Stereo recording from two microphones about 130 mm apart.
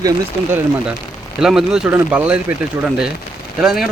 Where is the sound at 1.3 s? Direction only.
5° right (ahead or behind).